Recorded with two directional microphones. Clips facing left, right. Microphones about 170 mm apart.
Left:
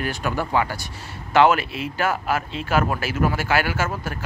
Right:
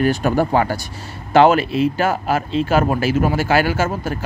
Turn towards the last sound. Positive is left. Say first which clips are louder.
# right 6 dB
turn(degrees=-30)  # may be behind; listen again after turning